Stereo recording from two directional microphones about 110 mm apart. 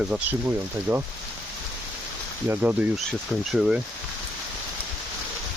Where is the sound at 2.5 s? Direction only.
15° right (ahead or behind).